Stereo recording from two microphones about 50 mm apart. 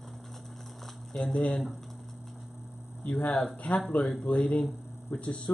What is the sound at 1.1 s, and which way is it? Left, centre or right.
Speech, centre.